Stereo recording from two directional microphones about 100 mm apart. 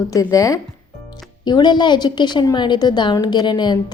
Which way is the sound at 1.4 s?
45° left (ahead or behind).